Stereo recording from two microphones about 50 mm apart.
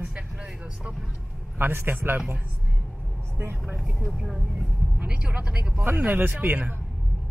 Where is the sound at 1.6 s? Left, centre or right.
Right.